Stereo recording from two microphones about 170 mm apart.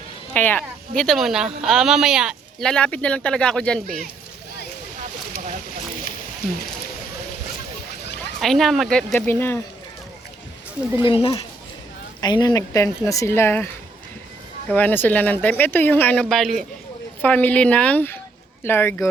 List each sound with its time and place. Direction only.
0.3 s speech: 10° left (ahead or behind)
8.4 s speech: centre (ahead or behind)
11.0 s a woman's voice: 30° left (ahead or behind); by 13.7 s 15° left (ahead or behind)
14.7 s speech: 10° left (ahead or behind)